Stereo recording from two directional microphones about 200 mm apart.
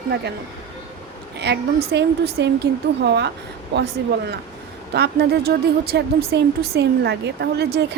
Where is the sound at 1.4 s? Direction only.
60° right (ahead or behind).